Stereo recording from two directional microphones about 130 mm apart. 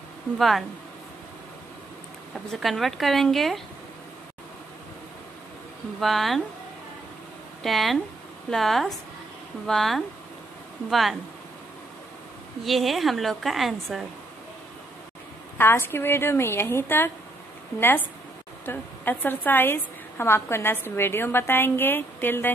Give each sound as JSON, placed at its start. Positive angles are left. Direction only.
{"t": 0.4, "sound": "a woman's voice", "side_deg": 0}
{"t": 2.5, "sound": "a woman's voice", "side_deg": 0}
{"t": 5.9, "sound": "a woman's voice", "side_deg": 0}
{"t": 7.6, "sound": "a woman's voice", "side_deg": 0}
{"t": 12.6, "sound": "a woman's voice", "side_deg": 0}
{"t": 15.5, "sound": "a woman's voice", "side_deg": 15}